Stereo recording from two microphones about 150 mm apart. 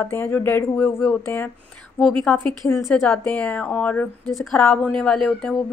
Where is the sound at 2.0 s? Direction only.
5° left (ahead or behind).